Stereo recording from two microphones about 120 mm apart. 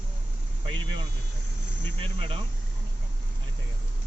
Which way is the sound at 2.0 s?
45° right (ahead or behind).